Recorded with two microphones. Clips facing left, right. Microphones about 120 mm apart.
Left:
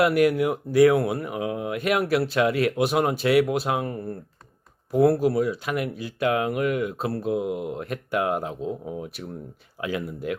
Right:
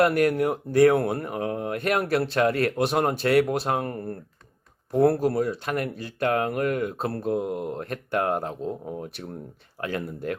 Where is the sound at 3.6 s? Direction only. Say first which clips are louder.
Even; 45° right (ahead or behind).